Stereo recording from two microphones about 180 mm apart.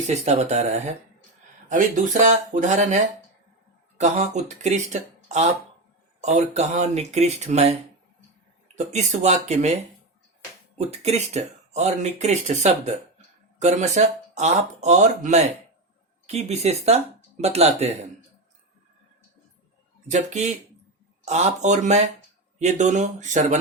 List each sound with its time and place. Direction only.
0.1 s speech: 40° right (ahead or behind)
10.8 s speech: 35° right (ahead or behind)
20.1 s speech: 40° right (ahead or behind)